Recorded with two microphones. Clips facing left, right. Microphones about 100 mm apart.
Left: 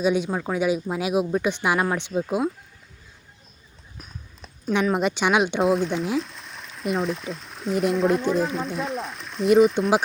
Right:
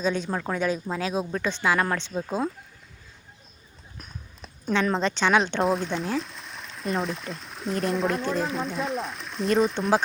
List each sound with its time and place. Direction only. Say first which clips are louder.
0.0 s speech: left 4 dB; 10° left (ahead or behind)
3.9 s a sound: left 1 dB; centre (ahead or behind)
4.7 s speech: left 2 dB; 15° left (ahead or behind)
5.6 s speech: left 4 dB; centre (ahead or behind)